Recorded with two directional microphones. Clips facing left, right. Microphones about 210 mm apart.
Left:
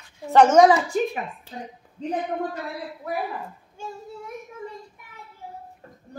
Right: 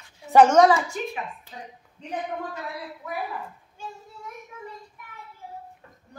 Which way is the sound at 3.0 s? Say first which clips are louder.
Left 5 dB; 35° left (ahead or behind).